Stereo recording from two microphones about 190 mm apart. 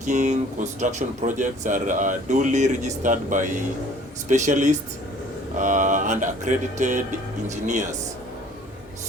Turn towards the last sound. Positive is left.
turn(degrees=-40)  # may be behind; listen again after turning